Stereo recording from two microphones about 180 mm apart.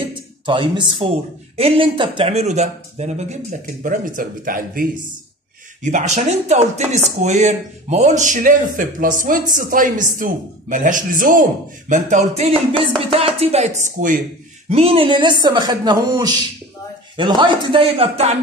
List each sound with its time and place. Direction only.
0.1 s a man's voice: 25° right (ahead or behind); by 14.2 s 45° right (ahead or behind)
14.7 s speech: 35° right (ahead or behind)